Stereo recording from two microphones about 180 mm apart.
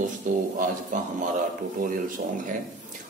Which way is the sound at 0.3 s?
45° right (ahead or behind).